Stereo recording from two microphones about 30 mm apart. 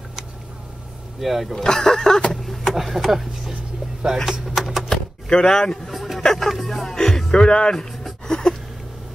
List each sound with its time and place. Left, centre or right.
1.2 s music: centre
1.5 s speech: centre
2.7 s speech: centre
4.0 s speech: right
4.6 s typewriter: centre
4.8 s a sound: left
5.9 s a sound: centre
6.2 s speech: centre
6.6 s music: centre
7.4 s speech: left
8.3 s a sound: left